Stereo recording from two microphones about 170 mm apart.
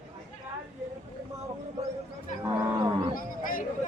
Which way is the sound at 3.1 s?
55° left (ahead or behind).